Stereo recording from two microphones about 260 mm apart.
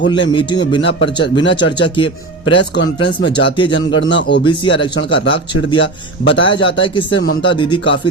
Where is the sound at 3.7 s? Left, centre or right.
Left.